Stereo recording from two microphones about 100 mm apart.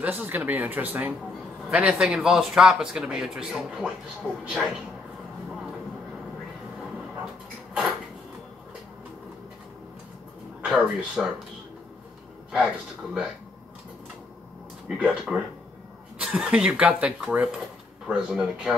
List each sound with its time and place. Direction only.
0.0 s speech: 15° right (ahead or behind)
10.6 s a sound: centre (ahead or behind)
11.0 s speech: 5° right (ahead or behind)
12.5 s speech: 5° right (ahead or behind)
14.9 s speech: 5° right (ahead or behind)